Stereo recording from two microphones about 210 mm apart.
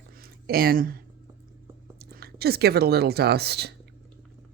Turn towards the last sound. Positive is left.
turn(degrees=-50)  # may be behind; listen again after turning